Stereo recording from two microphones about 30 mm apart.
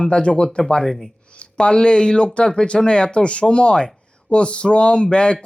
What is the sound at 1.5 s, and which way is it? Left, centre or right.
A man's voice, left.